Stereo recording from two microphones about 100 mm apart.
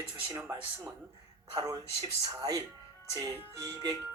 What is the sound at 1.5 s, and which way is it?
Speech, 40° right (ahead or behind).